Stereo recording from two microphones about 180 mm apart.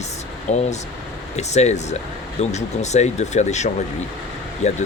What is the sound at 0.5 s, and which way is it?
Speech, 40° left (ahead or behind).